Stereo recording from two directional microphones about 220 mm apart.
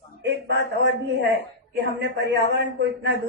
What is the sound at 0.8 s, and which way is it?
A man's voice, 50° right (ahead or behind).